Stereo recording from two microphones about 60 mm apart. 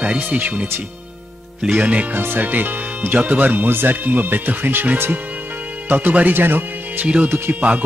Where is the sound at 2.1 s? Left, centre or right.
Right.